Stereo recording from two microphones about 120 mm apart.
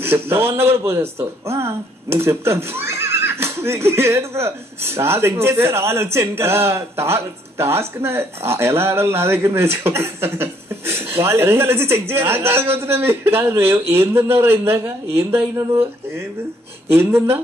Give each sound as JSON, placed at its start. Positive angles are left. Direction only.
{"t": 0.0, "sound": "speech", "side_deg": -20}
{"t": 16.9, "sound": "speech", "side_deg": -20}